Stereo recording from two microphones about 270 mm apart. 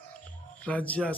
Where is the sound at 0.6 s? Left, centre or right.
Centre.